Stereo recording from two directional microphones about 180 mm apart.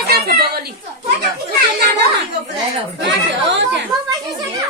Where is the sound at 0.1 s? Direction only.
60° right (ahead or behind).